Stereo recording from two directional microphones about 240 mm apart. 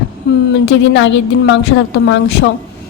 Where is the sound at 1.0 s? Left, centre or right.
Left.